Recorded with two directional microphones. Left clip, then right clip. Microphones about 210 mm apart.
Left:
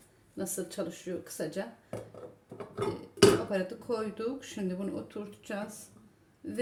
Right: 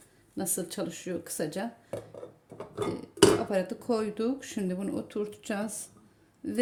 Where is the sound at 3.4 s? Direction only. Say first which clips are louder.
Right 3 dB; 40° right (ahead or behind).